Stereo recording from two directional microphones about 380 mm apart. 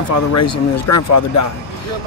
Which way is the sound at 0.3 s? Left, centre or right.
Left.